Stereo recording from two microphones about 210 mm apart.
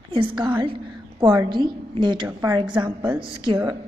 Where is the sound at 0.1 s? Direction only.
25° right (ahead or behind).